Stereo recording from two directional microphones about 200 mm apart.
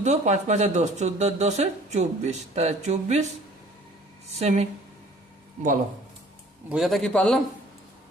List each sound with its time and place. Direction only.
0.0 s speech: 35° right (ahead or behind)
4.4 s speech: 35° right (ahead or behind)
6.7 s a man's voice: centre (ahead or behind)